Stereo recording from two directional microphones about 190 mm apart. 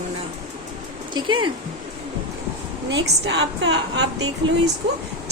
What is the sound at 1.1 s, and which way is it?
Speech, 25° right (ahead or behind).